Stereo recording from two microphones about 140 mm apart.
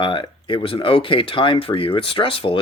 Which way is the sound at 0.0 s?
35° left (ahead or behind).